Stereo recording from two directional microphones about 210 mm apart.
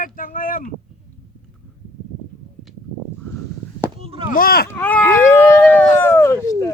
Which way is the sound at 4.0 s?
25° right (ahead or behind).